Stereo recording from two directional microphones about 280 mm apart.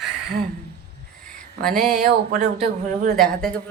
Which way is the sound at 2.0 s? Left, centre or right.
Right.